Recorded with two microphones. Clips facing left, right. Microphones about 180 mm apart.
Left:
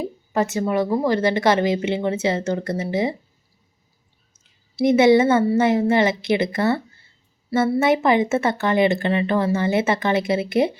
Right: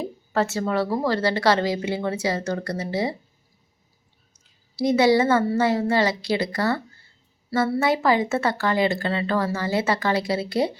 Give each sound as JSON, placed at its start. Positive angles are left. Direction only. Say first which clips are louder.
{"t": 0.0, "sound": "a woman's voice", "louder": "left 2 dB", "side_deg": 15}
{"t": 4.8, "sound": "a woman's voice", "louder": "left 4 dB", "side_deg": 20}